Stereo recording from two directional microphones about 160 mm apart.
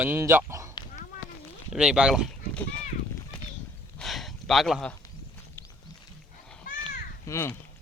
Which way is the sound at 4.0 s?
Centre (ahead or behind).